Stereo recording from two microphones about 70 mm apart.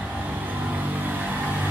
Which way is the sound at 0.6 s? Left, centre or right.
Right.